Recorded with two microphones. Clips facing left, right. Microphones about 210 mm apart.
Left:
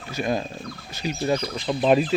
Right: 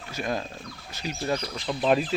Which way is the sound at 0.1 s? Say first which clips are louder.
Left 5 dB; 5° left (ahead or behind).